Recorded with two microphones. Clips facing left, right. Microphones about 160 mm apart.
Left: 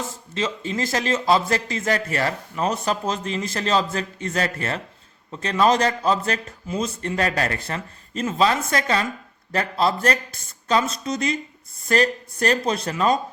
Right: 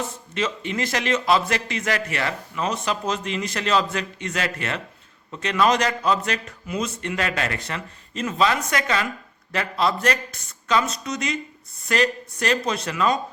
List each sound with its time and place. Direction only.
0.3 s a man's voice: 30° left (ahead or behind)